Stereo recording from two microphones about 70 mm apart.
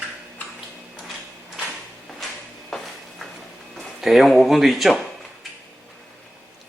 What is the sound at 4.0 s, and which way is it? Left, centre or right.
Speech, centre.